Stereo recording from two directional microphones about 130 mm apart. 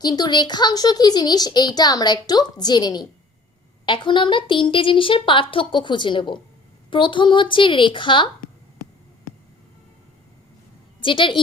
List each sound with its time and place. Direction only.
0.0 s a child's voice: 30° left (ahead or behind)
11.0 s a child's voice: 40° left (ahead or behind)